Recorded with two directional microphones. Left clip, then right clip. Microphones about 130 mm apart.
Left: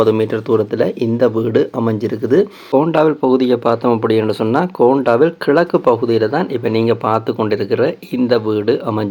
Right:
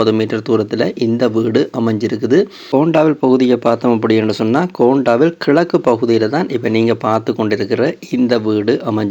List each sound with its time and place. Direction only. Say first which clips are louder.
0.0 s speech: left 1 dB; 20° right (ahead or behind)